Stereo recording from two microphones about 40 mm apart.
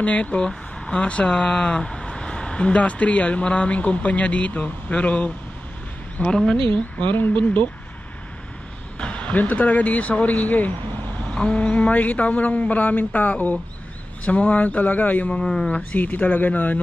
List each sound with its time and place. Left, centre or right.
0.0 s speech: left
0.4 s a sound: centre
1.0 s speech: left
7.0 s speech: left
8.9 s speech: left
11.2 s speech: left
11.9 s speech: left
12.8 s speech: left
14.2 s speech: left
15.2 s speech: left
16.0 s speech: left